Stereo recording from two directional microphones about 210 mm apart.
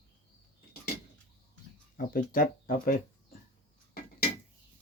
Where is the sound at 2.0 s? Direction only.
40° left (ahead or behind).